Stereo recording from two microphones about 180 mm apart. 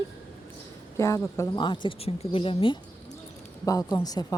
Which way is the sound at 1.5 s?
25° left (ahead or behind).